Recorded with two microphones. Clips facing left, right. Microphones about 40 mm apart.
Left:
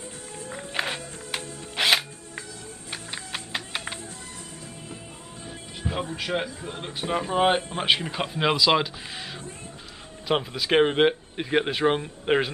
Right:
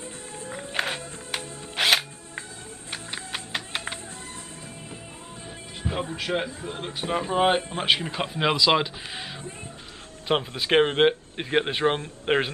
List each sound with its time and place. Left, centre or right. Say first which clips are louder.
0.5 s music: right 1 dB; centre
5.8 s music: even; centre
6.1 s speech: right 1 dB; centre
10.5 s speech: left 1 dB; centre